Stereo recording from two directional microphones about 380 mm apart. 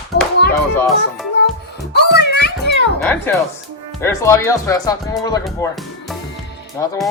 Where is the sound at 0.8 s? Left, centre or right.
Centre.